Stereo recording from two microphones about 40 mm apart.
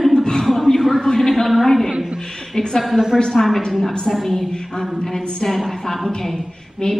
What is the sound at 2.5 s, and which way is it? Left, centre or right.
Speech, centre.